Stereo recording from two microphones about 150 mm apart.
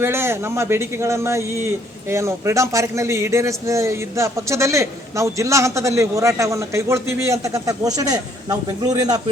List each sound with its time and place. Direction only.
0.0 s a man's voice: 15° right (ahead or behind)